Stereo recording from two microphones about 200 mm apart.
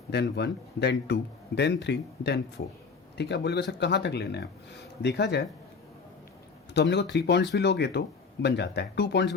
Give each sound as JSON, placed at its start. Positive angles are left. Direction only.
{"t": 0.1, "sound": "speech", "side_deg": 55}
{"t": 6.9, "sound": "speech", "side_deg": 60}